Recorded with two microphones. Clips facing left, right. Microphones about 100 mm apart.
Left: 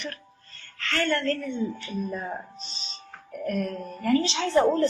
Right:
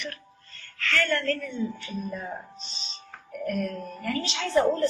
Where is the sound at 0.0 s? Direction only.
35° left (ahead or behind).